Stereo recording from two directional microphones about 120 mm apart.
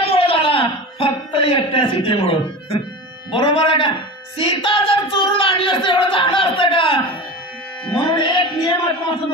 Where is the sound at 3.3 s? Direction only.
45° left (ahead or behind).